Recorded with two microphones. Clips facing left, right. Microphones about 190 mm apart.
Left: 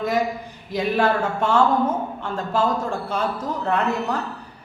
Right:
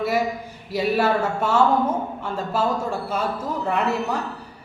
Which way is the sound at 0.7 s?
5° right (ahead or behind).